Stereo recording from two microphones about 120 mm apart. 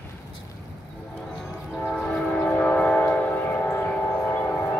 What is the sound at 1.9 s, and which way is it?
Train, 5° left (ahead or behind).